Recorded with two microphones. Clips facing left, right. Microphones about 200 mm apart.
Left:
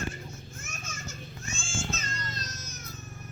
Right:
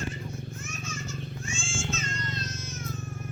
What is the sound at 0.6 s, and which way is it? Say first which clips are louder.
Children playing: right 5 dB; 45° left (ahead or behind).